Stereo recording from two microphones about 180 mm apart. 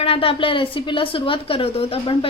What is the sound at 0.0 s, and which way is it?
A woman's voice, 30° left (ahead or behind).